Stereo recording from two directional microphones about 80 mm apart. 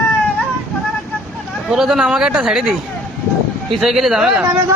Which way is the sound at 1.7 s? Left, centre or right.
Centre.